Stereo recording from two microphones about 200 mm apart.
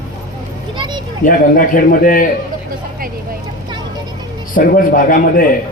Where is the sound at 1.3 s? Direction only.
45° left (ahead or behind).